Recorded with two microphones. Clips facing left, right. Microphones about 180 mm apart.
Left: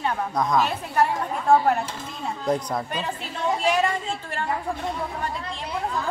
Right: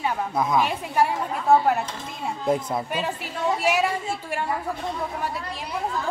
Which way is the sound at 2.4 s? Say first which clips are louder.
Right 1 dB; 5° right (ahead or behind).